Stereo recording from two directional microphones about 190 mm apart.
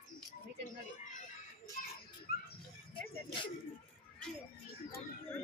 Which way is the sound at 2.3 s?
50° left (ahead or behind).